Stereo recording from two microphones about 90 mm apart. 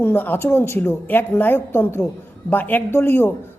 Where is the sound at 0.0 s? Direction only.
25° left (ahead or behind).